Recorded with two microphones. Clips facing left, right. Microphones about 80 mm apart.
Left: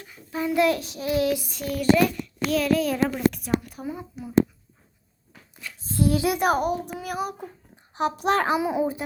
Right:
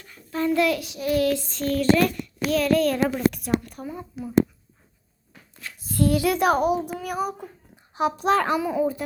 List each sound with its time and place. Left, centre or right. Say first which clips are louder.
0.0 s a sound: right 3 dB; centre
0.6 s child singing: left 1 dB; left
1.1 s child singing: right 1 dB; centre
2.1 s child singing: right 1 dB; centre
3.2 s a woman's voice: right 1 dB; centre
5.8 s speech: right 1 dB; left
6.3 s a woman's voice: right 2 dB; centre
8.6 s child singing: right 1 dB; centre